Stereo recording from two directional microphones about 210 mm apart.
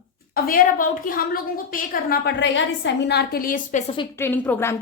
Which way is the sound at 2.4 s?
60° left (ahead or behind).